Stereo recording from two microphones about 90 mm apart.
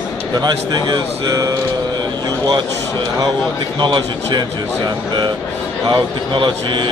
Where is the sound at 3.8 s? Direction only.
55° right (ahead or behind).